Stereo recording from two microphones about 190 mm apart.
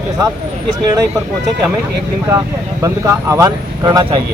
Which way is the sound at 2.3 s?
15° right (ahead or behind).